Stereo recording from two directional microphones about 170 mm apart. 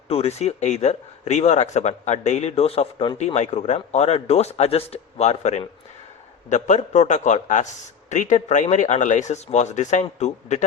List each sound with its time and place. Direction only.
0.1 s speech: 40° left (ahead or behind)